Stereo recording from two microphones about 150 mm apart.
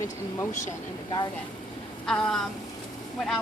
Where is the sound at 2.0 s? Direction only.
5° left (ahead or behind).